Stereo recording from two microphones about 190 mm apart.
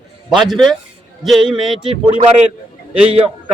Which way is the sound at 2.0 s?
30° right (ahead or behind).